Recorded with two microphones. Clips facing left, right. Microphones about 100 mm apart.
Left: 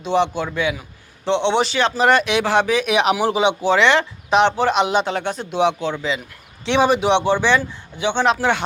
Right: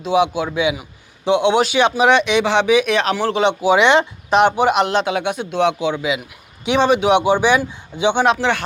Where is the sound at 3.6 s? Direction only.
20° right (ahead or behind).